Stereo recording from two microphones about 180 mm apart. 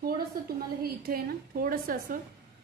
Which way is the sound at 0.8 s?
55° right (ahead or behind).